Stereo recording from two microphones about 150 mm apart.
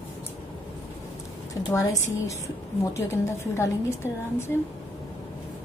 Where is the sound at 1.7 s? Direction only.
20° left (ahead or behind).